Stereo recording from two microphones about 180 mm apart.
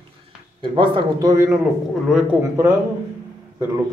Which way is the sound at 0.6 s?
25° right (ahead or behind).